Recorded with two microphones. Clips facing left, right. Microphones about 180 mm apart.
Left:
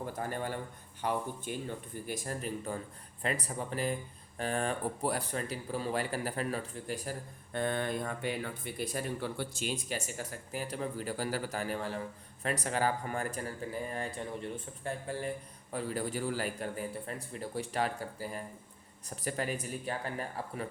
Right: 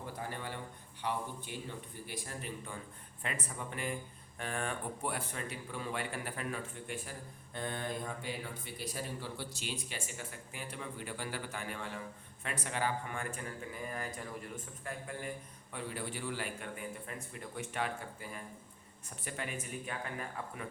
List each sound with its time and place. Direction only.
0.0 s a sound: 45° left (ahead or behind)
1.0 s speech: 45° left (ahead or behind)
7.5 s speech: 60° left (ahead or behind); by 20.7 s 35° left (ahead or behind)